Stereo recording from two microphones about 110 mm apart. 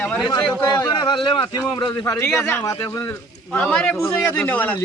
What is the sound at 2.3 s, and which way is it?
Speech, 10° left (ahead or behind).